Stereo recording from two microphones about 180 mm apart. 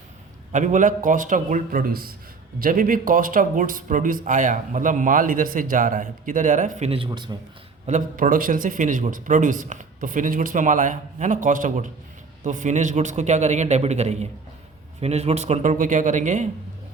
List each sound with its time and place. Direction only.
0.5 s speech: 45° right (ahead or behind); by 7.3 s 25° right (ahead or behind)
7.9 s a man's voice: 45° right (ahead or behind)